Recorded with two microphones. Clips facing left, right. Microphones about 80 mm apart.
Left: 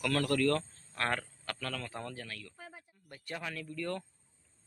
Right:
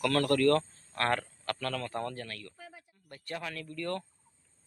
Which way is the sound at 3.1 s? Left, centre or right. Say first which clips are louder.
Right 2 dB; centre.